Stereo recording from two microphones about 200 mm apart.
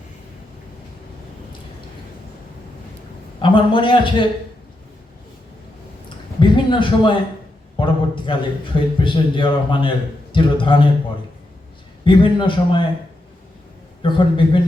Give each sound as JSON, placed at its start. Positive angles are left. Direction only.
{"t": 3.4, "sound": "a man's voice", "side_deg": 25}
{"t": 6.4, "sound": "a sound", "side_deg": 25}
{"t": 7.8, "sound": "a man's voice", "side_deg": 25}
{"t": 12.0, "sound": "a man's voice", "side_deg": 25}
{"t": 14.0, "sound": "a man's voice", "side_deg": 25}